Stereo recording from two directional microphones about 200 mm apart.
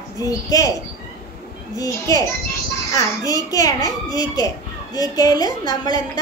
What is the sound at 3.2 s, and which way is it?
A woman's voice, 15° left (ahead or behind).